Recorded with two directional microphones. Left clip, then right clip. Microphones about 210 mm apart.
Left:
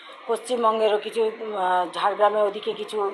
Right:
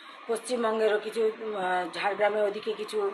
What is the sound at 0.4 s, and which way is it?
A woman's voice, 10° left (ahead or behind).